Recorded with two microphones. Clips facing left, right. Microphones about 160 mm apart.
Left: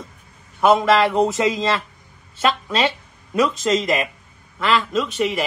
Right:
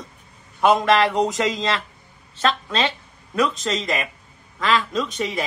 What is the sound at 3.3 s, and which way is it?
Speech, centre (ahead or behind).